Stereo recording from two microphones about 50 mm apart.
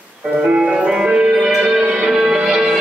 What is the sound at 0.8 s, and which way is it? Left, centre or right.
Music, centre.